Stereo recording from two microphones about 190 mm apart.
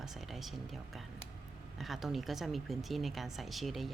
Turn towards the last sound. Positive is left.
turn(degrees=0)  # may be behind; listen again after turning